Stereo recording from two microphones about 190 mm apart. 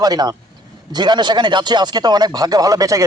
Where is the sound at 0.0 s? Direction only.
20° right (ahead or behind).